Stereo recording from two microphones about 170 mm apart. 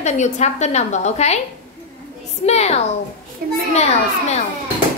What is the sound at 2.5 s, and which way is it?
A woman's voice, 40° left (ahead or behind).